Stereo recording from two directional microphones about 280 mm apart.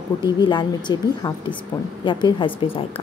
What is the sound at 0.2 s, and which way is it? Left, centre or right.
A woman's voice, centre.